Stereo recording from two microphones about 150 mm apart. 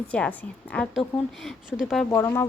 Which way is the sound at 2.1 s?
20° left (ahead or behind).